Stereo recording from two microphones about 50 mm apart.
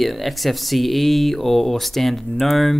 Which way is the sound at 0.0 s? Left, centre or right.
Centre.